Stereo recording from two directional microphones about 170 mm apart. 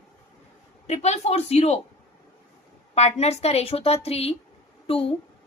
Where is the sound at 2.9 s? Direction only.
40° left (ahead or behind).